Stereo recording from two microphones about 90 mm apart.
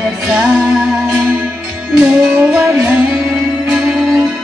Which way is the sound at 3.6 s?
5° right (ahead or behind).